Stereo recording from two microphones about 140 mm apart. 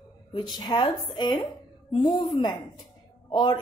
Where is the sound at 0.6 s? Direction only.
30° left (ahead or behind).